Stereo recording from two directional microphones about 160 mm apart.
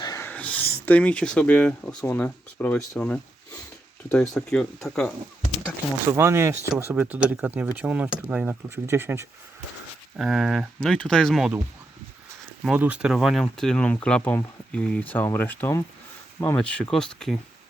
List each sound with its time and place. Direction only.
0.0 s a sound: 20° left (ahead or behind)
0.3 s speech: 10° left (ahead or behind)
4.4 s speech: centre (ahead or behind)
6.1 s speech: 15° right (ahead or behind)
10.2 s speech: centre (ahead or behind)
12.6 s speech: 10° right (ahead or behind)